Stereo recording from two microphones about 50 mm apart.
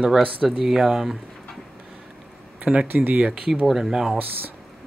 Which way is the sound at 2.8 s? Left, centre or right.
Right.